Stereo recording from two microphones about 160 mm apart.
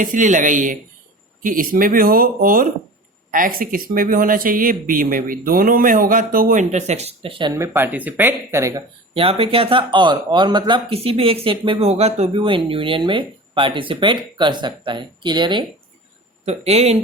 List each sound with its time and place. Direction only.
0.0 s speech: 55° right (ahead or behind); by 7.5 s 35° right (ahead or behind)
7.5 s speech: 15° right (ahead or behind)
9.1 s speech: 35° right (ahead or behind)
16.5 s speech: 40° right (ahead or behind)